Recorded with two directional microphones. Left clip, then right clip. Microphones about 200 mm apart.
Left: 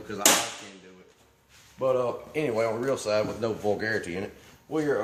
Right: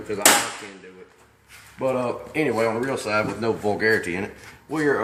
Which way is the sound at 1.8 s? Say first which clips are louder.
Right 2 dB; 25° left (ahead or behind).